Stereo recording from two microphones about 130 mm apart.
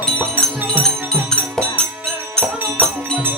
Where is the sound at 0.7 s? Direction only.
5° left (ahead or behind).